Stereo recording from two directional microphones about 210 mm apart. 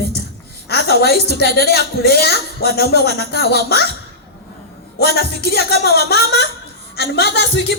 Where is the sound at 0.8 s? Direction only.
50° left (ahead or behind).